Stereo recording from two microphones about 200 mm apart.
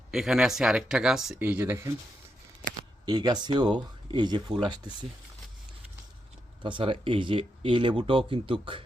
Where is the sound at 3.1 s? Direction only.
20° right (ahead or behind).